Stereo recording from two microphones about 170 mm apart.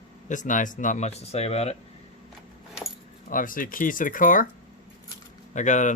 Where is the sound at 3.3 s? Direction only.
55° left (ahead or behind).